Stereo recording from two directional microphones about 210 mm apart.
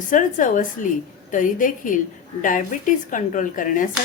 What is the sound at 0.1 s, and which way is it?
Dishes, 40° left (ahead or behind).